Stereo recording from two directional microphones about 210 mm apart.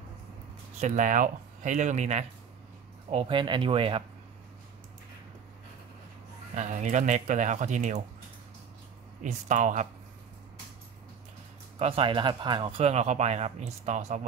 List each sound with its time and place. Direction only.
0.7 s speech: 35° right (ahead or behind)
6.5 s speech: 35° right (ahead or behind)
9.2 s speech: 35° right (ahead or behind)
11.8 s speech: 25° right (ahead or behind)